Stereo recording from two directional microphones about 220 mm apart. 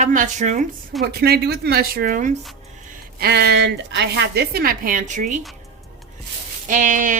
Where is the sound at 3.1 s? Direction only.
45° right (ahead or behind).